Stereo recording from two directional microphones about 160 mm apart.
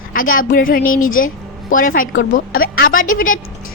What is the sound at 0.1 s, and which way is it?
A woman's voice, 60° left (ahead or behind).